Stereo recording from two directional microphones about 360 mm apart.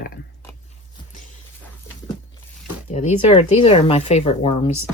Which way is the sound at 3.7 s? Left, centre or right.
Centre.